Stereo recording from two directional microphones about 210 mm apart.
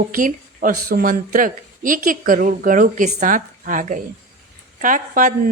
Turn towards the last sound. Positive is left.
turn(degrees=-40)  # may be behind; listen again after turning